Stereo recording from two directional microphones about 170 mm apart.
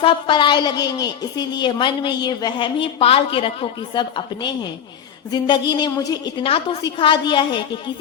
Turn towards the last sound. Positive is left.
turn(degrees=25)  # may be behind; listen again after turning